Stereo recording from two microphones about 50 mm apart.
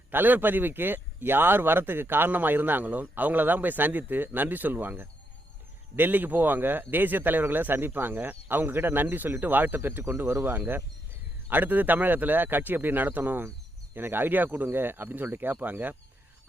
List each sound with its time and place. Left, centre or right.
0.1 s speech: right